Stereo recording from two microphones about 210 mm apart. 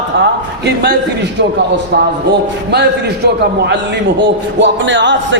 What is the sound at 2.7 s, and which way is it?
A man's voice, 50° right (ahead or behind).